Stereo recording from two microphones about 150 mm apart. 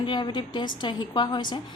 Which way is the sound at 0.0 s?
30° left (ahead or behind).